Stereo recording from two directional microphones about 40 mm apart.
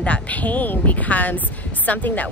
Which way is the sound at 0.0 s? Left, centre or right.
Left.